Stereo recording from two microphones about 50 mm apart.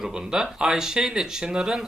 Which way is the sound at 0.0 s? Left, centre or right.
Centre.